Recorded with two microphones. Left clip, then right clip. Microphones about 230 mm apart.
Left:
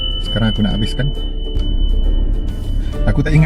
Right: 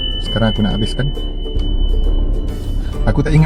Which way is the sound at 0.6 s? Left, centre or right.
Left.